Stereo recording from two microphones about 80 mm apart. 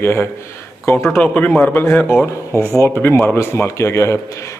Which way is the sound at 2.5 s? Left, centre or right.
Right.